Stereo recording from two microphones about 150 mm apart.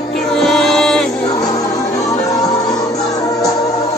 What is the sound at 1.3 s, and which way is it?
Music, 25° left (ahead or behind).